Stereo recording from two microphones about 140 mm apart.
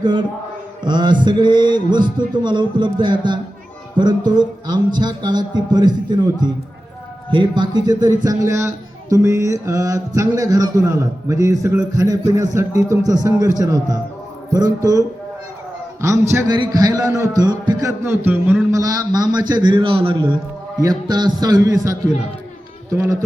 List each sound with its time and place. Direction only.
0.0 s a man's voice: 35° right (ahead or behind)